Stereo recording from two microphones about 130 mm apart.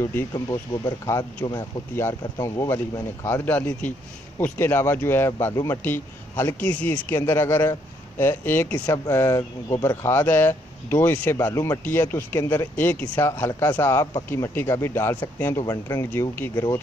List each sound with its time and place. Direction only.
0.3 s speech: 25° left (ahead or behind)
3.3 s speech: 15° left (ahead or behind)
8.8 s speech: 25° left (ahead or behind)
16.1 s speech: 15° left (ahead or behind)